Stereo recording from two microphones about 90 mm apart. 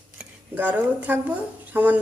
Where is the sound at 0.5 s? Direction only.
15° right (ahead or behind).